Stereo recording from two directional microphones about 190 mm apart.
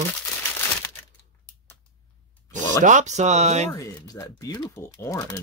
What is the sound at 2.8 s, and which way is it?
Speech, 40° right (ahead or behind).